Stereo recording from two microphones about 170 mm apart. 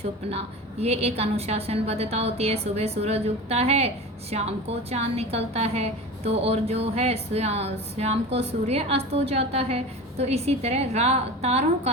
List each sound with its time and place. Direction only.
0.0 s a woman's voice: 35° right (ahead or behind)